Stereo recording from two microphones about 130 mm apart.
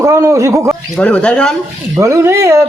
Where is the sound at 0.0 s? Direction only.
25° right (ahead or behind).